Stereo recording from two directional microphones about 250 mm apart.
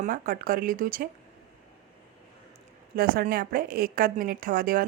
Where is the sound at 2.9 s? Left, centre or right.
Right.